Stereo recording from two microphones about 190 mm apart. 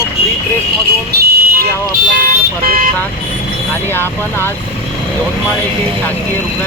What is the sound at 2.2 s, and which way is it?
Speech, 45° right (ahead or behind).